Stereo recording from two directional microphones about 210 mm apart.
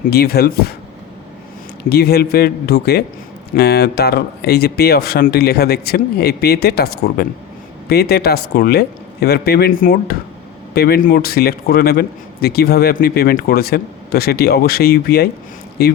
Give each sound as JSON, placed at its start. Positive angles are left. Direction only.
{"t": 0.1, "sound": "speech", "side_deg": 50}
{"t": 1.9, "sound": "speech", "side_deg": 50}